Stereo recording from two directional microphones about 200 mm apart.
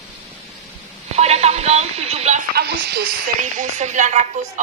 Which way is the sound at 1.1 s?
30° right (ahead or behind).